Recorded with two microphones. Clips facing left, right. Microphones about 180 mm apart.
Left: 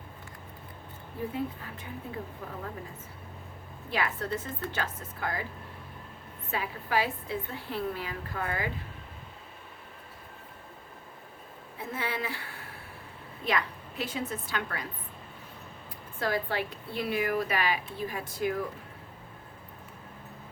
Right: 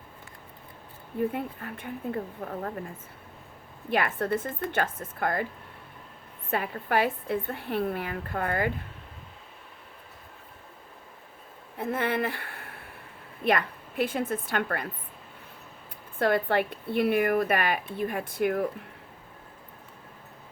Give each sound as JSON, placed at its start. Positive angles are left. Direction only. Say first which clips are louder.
{"t": 1.3, "sound": "speech", "louder": "right 1 dB", "side_deg": -55}
{"t": 3.9, "sound": "speech", "louder": "right 5 dB", "side_deg": -55}
{"t": 6.5, "sound": "speech", "louder": "right 3 dB", "side_deg": -55}
{"t": 11.8, "sound": "speech", "louder": "right 7 dB", "side_deg": -55}
{"t": 16.1, "sound": "speech", "louder": "right 6 dB", "side_deg": -55}